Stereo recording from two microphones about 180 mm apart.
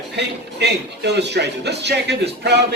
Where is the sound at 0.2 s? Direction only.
70° right (ahead or behind).